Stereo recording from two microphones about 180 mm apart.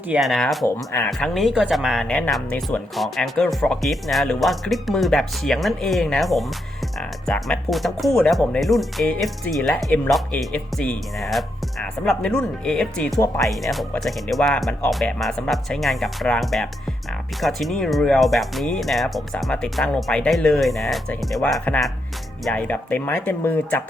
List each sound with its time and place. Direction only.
0.1 s speech: centre (ahead or behind)
13.1 s speech: 15° left (ahead or behind)
13.4 s speech: centre (ahead or behind)